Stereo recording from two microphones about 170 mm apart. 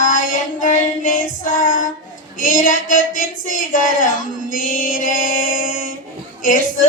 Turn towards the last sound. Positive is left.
turn(degrees=55)  # may be behind; listen again after turning